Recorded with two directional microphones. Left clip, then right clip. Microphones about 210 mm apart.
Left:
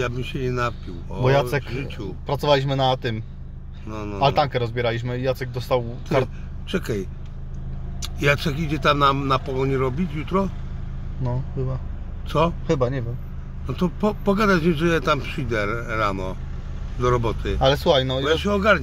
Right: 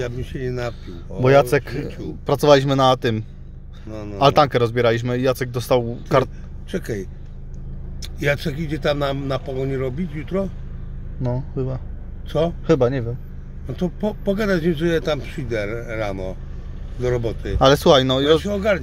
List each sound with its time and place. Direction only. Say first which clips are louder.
0.0 s a man's voice: left 1 dB; 10° right (ahead or behind)
1.2 s speech: right 6 dB; 55° right (ahead or behind)
3.9 s a man's voice: left 1 dB; 10° right (ahead or behind)
4.2 s speech: right 5 dB; 55° right (ahead or behind)
6.7 s a man's voice: left 1 dB; 10° right (ahead or behind)
11.2 s speech: right 4 dB; 50° right (ahead or behind)
12.3 s a man's voice: even; 10° right (ahead or behind)
12.6 s speech: right 5 dB; 50° right (ahead or behind)
13.7 s a man's voice: left 1 dB; 10° right (ahead or behind)
17.6 s speech: right 5 dB; 50° right (ahead or behind)
18.4 s a man's voice: left 2 dB; 10° right (ahead or behind)